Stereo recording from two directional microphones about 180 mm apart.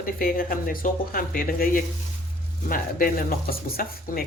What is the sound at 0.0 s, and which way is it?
Speech, 50° left (ahead or behind).